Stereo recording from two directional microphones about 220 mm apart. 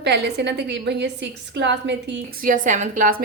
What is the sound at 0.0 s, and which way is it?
A woman's voice, 50° right (ahead or behind).